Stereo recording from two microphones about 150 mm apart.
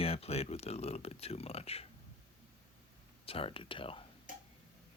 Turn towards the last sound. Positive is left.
turn(degrees=35)  # may be behind; listen again after turning